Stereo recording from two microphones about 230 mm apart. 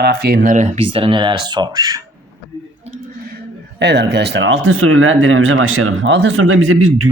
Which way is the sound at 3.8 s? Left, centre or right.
Right.